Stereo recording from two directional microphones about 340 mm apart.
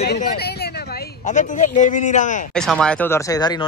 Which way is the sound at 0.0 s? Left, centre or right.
Left.